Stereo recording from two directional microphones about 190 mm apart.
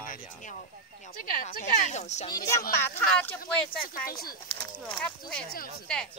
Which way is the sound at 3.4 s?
50° left (ahead or behind).